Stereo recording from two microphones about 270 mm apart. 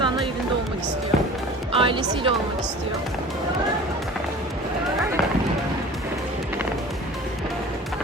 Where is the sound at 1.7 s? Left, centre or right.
Centre.